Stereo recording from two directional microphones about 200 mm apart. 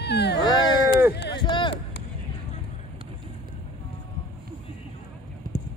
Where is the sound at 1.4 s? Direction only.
25° left (ahead or behind).